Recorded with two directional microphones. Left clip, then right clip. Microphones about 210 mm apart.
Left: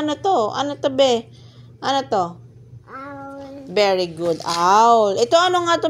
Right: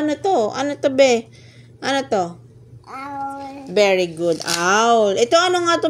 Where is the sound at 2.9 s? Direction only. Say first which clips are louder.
Right 6 dB; 45° right (ahead or behind).